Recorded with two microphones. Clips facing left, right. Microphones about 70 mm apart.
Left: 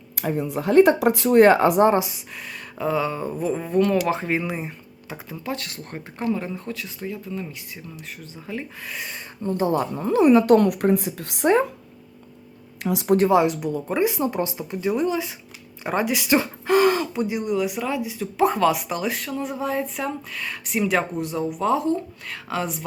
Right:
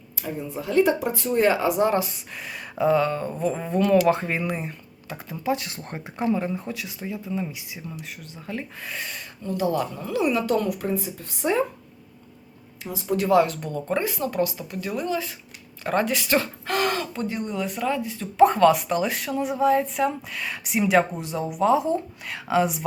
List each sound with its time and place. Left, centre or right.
0.2 s speech: left
0.7 s speech: left
1.4 s speech: left
2.1 s speech: centre
5.5 s speech: centre
6.1 s speech: centre
9.4 s a woman's voice: left
12.8 s speech: left
13.2 s speech: centre
14.1 s speech: left; by 22.8 s centre